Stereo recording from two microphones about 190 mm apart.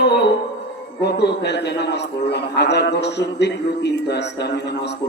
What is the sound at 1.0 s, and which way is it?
A man's voice, 65° left (ahead or behind).